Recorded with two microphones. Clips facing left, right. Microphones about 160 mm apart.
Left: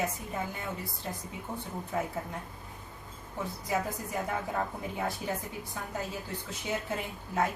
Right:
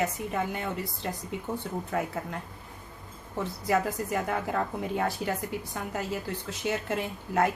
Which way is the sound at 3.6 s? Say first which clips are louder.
Right 6 dB; 75° right (ahead or behind).